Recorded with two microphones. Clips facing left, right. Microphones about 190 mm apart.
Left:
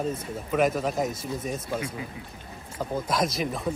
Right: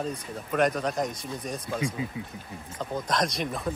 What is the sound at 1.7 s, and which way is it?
Speech, 25° left (ahead or behind).